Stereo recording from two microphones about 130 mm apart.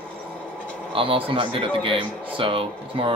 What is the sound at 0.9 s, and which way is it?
A man's voice, 45° right (ahead or behind).